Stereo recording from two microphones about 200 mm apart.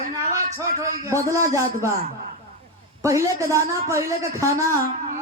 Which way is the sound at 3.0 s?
15° right (ahead or behind).